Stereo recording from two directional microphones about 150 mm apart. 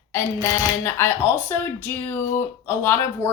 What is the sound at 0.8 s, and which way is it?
Speech, 15° left (ahead or behind).